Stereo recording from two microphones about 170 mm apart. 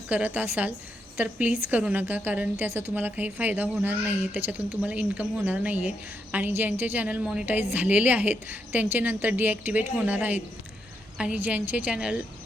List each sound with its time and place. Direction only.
0.1 s a woman's voice: 10° right (ahead or behind)